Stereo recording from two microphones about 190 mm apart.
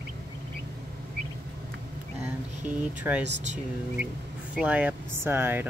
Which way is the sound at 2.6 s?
5° right (ahead or behind).